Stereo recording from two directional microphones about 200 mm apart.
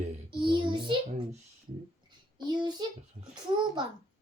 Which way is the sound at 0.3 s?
25° right (ahead or behind).